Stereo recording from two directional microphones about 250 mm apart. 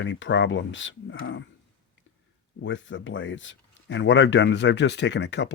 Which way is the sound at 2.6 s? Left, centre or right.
Left.